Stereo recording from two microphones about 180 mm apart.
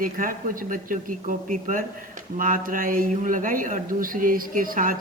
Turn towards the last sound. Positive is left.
turn(degrees=-50)  # may be behind; listen again after turning